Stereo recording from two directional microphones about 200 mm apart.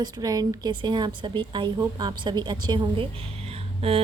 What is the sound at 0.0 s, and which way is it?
A woman's voice, 20° right (ahead or behind).